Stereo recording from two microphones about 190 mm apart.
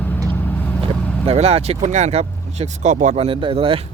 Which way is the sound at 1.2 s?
35° right (ahead or behind).